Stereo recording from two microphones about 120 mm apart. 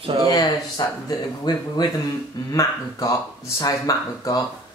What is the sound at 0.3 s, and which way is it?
Speech, 30° left (ahead or behind).